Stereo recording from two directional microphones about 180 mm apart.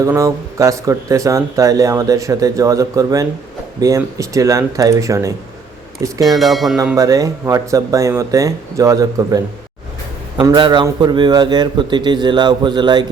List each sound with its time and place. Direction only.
0.0 s speech: 15° right (ahead or behind)
6.2 s speech: centre (ahead or behind)
6.9 s a man's voice: 20° right (ahead or behind)